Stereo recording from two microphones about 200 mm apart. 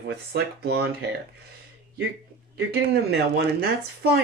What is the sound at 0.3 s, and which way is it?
Speech, 55° right (ahead or behind).